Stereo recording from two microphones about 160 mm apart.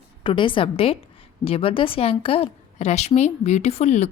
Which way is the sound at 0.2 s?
30° left (ahead or behind).